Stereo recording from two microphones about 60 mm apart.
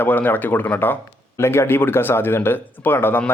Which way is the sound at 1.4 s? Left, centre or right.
Left.